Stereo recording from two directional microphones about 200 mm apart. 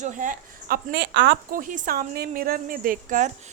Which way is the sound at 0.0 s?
40° right (ahead or behind).